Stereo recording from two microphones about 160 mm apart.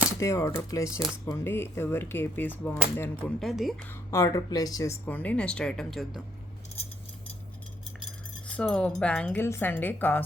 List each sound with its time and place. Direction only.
0.2 s a woman's voice: 20° left (ahead or behind); by 3.8 s centre (ahead or behind)
3.8 s a woman's voice: 20° left (ahead or behind); by 6.2 s centre (ahead or behind)
8.4 s a woman's voice: 5° left (ahead or behind)